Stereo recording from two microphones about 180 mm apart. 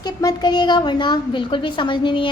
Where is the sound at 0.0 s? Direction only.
20° left (ahead or behind).